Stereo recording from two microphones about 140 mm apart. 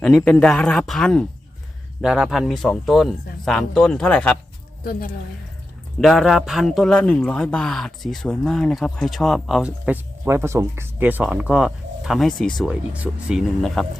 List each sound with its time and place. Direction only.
0.0 s a man's voice: 5° left (ahead or behind)
2.0 s a man's voice: 5° right (ahead or behind); by 4.4 s 10° left (ahead or behind)
4.8 s a woman's voice: 90° left
6.0 s a man's voice: centre (ahead or behind)
12.6 s a man's voice: 10° right (ahead or behind)